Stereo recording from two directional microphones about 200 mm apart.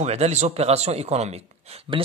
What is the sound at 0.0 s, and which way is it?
Speech, 35° right (ahead or behind).